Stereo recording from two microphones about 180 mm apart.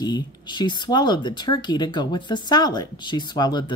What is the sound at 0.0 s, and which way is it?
Speech, 25° left (ahead or behind).